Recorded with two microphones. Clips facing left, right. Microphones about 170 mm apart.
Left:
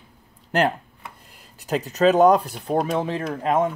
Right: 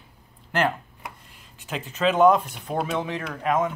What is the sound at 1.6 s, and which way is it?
Speech, 40° left (ahead or behind).